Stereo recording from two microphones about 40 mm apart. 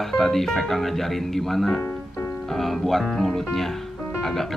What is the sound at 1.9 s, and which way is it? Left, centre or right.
Music, left.